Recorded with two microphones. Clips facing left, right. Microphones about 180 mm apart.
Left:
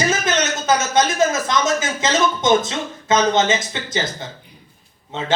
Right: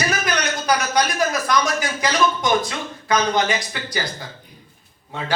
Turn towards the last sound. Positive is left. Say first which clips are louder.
# left 4 dB
turn(degrees=20)  # may be behind; listen again after turning